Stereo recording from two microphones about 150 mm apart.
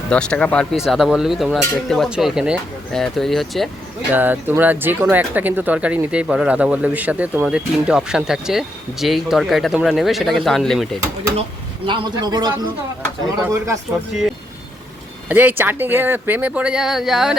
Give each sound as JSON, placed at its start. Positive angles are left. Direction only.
{"t": 0.1, "sound": "speech", "side_deg": 5}
{"t": 4.1, "sound": "speech", "side_deg": -10}
{"t": 11.9, "sound": "a man's voice", "side_deg": -30}
{"t": 15.3, "sound": "speech", "side_deg": -10}